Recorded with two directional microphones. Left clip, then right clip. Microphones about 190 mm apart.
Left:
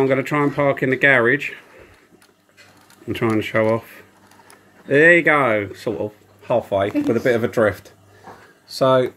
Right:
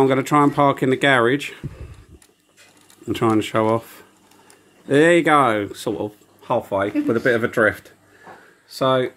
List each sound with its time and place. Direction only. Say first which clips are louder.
0.0 s speech: right 2 dB; 25° right (ahead or behind)
3.1 s speech: right 1 dB; 20° right (ahead or behind)
7.2 s speech: right 1 dB; centre (ahead or behind)